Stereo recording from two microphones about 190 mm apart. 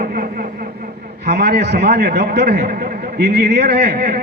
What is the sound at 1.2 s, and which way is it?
A man's voice, 60° right (ahead or behind).